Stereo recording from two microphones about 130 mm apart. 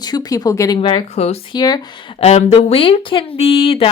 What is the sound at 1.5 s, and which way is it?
Speech, 30° left (ahead or behind).